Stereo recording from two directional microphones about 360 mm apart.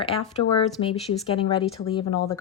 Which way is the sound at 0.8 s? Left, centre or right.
Centre.